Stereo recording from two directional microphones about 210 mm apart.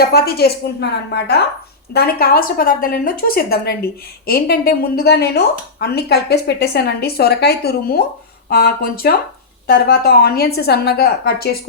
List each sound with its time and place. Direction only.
0.1 s a woman's voice: 50° left (ahead or behind)